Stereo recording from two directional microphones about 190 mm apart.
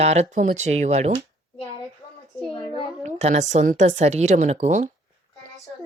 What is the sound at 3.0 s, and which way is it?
A woman's voice, 35° right (ahead or behind).